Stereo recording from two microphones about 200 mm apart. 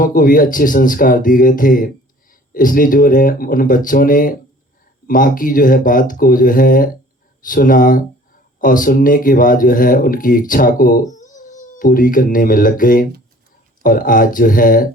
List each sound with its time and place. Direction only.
0.0 s speech: 40° left (ahead or behind)